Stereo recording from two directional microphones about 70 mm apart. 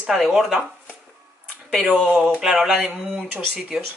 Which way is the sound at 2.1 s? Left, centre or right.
Centre.